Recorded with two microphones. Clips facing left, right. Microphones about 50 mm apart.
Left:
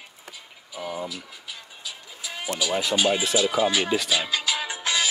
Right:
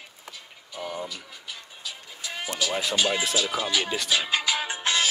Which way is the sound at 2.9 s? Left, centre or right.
Centre.